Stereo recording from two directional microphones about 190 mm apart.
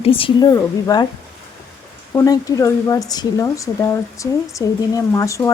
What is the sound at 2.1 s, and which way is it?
Speech, 15° left (ahead or behind).